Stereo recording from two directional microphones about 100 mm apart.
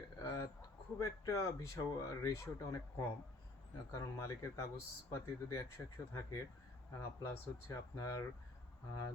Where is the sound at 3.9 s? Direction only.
30° left (ahead or behind).